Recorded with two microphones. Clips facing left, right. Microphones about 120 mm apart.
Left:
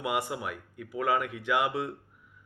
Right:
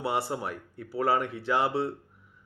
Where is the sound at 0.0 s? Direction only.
35° right (ahead or behind).